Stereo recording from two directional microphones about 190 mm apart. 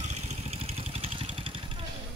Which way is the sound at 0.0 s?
35° right (ahead or behind).